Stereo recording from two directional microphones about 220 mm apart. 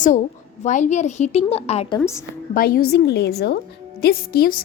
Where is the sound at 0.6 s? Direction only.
35° left (ahead or behind).